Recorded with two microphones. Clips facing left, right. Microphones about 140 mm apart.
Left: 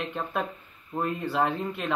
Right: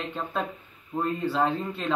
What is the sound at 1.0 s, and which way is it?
Speech, 10° left (ahead or behind).